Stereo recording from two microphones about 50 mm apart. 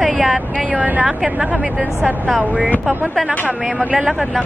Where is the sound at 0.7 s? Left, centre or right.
Right.